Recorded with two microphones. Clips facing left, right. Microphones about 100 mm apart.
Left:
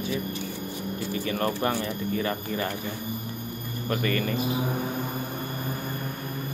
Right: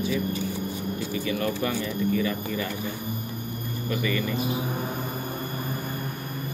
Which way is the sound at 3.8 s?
50° left (ahead or behind).